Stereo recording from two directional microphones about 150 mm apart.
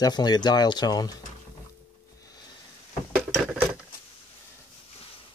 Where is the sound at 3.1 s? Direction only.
5° right (ahead or behind).